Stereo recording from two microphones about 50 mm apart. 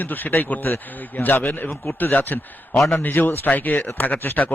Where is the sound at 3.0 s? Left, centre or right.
Left.